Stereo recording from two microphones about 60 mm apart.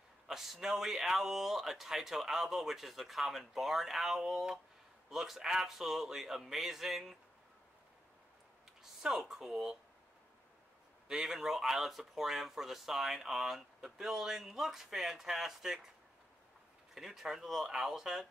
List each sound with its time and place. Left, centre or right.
0.3 s speech: centre
9.0 s speech: centre
11.1 s speech: centre
16.9 s speech: centre